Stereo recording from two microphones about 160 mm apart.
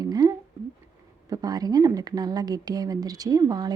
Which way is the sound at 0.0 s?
25° right (ahead or behind).